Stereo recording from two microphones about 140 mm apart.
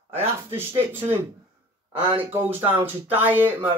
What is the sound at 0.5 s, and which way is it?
Speech, 15° right (ahead or behind).